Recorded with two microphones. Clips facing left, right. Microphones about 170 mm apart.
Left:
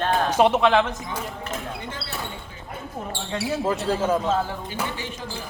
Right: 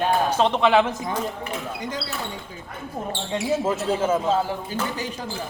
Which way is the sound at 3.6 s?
Centre (ahead or behind).